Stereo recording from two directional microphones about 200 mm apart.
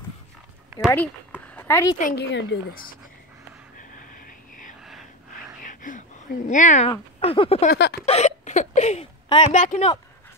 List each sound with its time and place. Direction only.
0.8 s speech: 10° left (ahead or behind)
2.0 s speech: 45° left (ahead or behind)
4.8 s a sound: centre (ahead or behind)
5.6 s a sound: 40° left (ahead or behind)
6.9 s speech: 25° left (ahead or behind)
7.7 s speech: 55° left (ahead or behind)
8.0 s a woman's voice: 35° left (ahead or behind)